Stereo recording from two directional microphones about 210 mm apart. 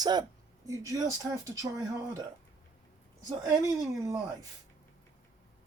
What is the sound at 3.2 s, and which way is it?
Speech, 15° right (ahead or behind).